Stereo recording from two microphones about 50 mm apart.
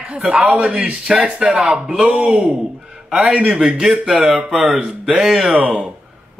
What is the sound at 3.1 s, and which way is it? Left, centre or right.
A man's voice, centre.